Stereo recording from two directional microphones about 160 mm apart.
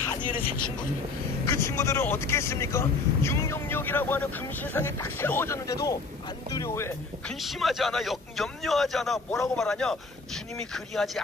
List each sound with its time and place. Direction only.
1.4 s speech: 15° left (ahead or behind)
7.2 s a man's voice: centre (ahead or behind)